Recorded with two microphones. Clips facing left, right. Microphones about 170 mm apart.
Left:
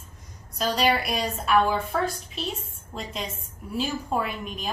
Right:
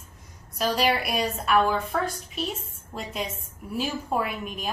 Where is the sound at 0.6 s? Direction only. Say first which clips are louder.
Even; 5° right (ahead or behind).